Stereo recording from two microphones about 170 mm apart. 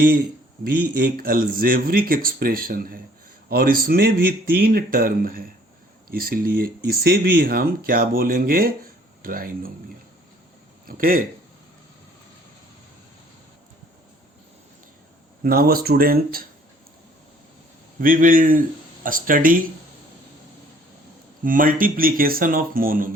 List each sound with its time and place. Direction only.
0.6 s speech: 60° right (ahead or behind)
10.8 s speech: 55° right (ahead or behind)
15.4 s speech: 60° right (ahead or behind)
18.0 s a man's voice: 55° right (ahead or behind)
21.4 s speech: 55° right (ahead or behind)